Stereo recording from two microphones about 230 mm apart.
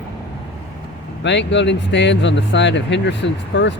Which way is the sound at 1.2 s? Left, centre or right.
Left.